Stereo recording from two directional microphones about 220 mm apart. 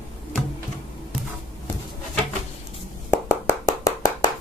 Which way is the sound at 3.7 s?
15° left (ahead or behind).